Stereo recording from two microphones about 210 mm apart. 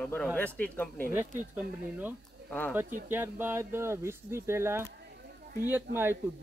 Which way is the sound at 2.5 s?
5° left (ahead or behind).